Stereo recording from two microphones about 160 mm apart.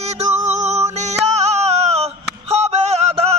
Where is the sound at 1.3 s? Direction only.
45° right (ahead or behind).